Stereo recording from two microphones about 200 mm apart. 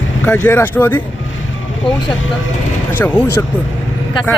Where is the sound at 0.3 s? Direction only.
10° left (ahead or behind).